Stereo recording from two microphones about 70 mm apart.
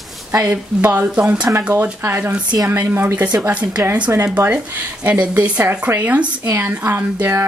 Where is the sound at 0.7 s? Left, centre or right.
Right.